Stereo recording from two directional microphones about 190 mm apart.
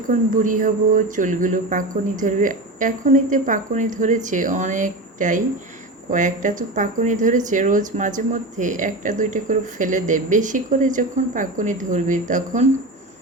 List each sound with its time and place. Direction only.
0.1 s speech: 45° right (ahead or behind)